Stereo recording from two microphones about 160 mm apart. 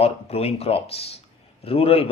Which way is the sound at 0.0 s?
40° left (ahead or behind).